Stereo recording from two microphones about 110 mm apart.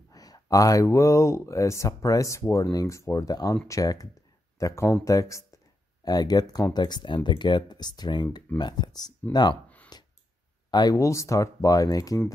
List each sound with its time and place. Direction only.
0.1 s speech: 35° left (ahead or behind)
9.9 s a sound: 40° left (ahead or behind)
10.7 s speech: 35° left (ahead or behind)